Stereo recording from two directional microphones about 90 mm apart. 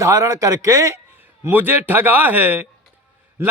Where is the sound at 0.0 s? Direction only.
35° right (ahead or behind).